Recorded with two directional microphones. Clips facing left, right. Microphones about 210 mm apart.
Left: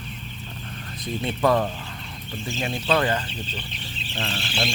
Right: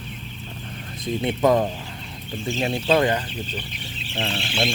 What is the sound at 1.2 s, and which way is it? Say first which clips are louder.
Speech: right 2 dB; 20° right (ahead or behind).